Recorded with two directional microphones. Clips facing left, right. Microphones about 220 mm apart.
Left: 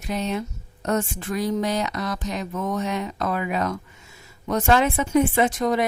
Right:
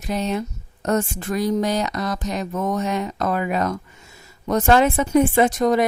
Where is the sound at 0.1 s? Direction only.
40° right (ahead or behind).